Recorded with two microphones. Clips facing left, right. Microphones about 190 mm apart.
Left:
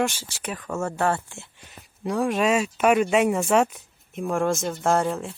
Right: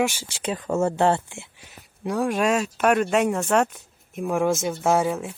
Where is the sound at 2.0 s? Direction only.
Centre (ahead or behind).